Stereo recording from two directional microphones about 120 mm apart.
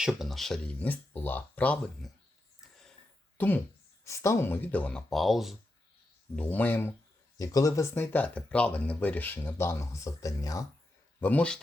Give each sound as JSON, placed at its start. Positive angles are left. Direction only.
{"t": 0.0, "sound": "speech", "side_deg": -5}
{"t": 0.8, "sound": "speech", "side_deg": 15}
{"t": 3.3, "sound": "speech", "side_deg": 15}
{"t": 6.3, "sound": "speech", "side_deg": 15}
{"t": 7.3, "sound": "speech", "side_deg": 30}
{"t": 11.2, "sound": "speech", "side_deg": 10}